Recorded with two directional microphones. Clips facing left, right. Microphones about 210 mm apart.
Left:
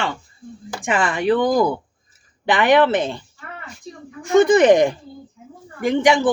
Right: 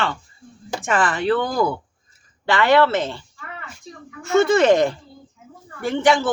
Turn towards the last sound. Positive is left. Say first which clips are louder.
# left 2 dB
turn(degrees=15)  # may be behind; listen again after turning